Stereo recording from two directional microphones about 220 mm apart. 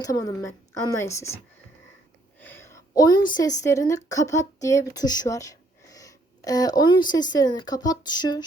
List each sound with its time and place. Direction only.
0.0 s a woman's voice: 15° left (ahead or behind)
2.4 s a woman's voice: 10° left (ahead or behind)